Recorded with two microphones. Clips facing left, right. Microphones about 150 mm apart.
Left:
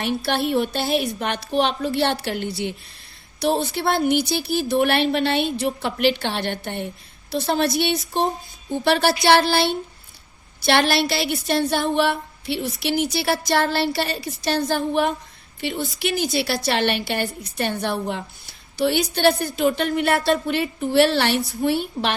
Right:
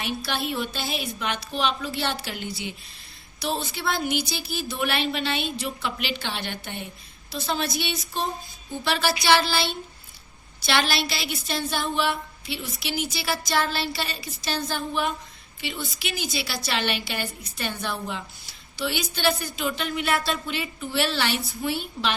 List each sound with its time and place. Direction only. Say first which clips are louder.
0.0 s a woman's voice: left 7 dB; 60° left (ahead or behind)